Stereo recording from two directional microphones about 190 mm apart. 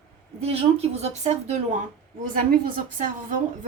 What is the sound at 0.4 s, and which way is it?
A woman's voice, 35° right (ahead or behind).